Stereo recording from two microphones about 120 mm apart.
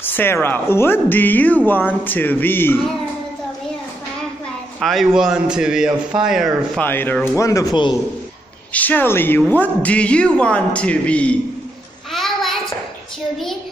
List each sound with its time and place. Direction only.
0.0 s a man's voice: 15° left (ahead or behind)
4.7 s a man's voice: centre (ahead or behind)
6.8 s a man's voice: 15° left (ahead or behind)
8.7 s a man's voice: 15° left (ahead or behind)
12.1 s child singing: centre (ahead or behind)